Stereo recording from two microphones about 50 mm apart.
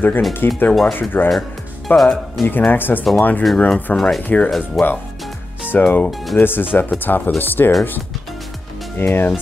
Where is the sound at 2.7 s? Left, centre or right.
Left.